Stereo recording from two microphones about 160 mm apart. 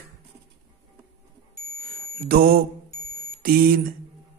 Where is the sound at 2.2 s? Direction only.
65° right (ahead or behind).